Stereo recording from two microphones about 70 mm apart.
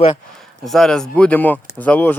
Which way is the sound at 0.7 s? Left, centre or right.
Centre.